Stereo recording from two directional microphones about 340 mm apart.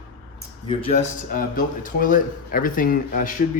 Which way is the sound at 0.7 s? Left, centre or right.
Centre.